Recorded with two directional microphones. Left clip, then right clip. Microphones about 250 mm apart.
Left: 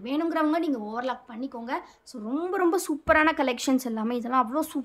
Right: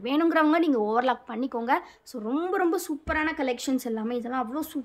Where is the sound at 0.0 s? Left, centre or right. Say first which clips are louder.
Right 4 dB; centre.